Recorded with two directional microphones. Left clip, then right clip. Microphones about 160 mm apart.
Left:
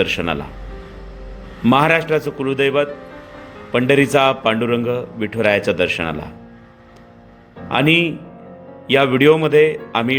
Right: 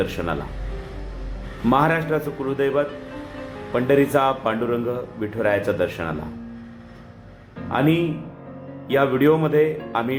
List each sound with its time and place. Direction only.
0.0 s speech: 40° left (ahead or behind)
1.6 s a man's voice: 45° left (ahead or behind)
7.7 s a man's voice: 45° left (ahead or behind)